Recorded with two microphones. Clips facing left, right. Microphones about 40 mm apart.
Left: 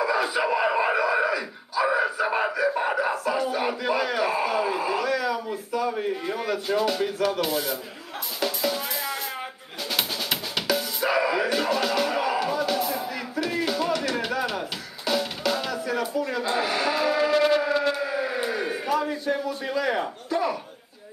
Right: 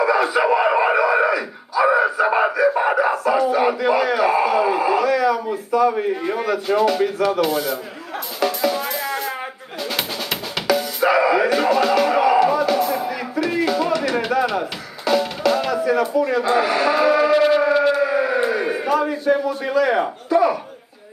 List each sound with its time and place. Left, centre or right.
0.0 s a sound: centre
3.1 s speech: centre
8.4 s music: centre
9.9 s drum: centre
11.0 s music: centre
16.3 s cattle: centre
18.9 s a sound: centre